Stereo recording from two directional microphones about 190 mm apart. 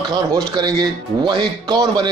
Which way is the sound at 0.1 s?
25° right (ahead or behind).